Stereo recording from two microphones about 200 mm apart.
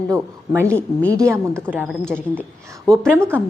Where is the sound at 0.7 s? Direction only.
5° left (ahead or behind).